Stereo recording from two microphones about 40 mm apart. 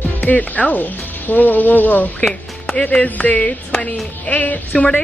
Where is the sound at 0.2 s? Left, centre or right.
Left.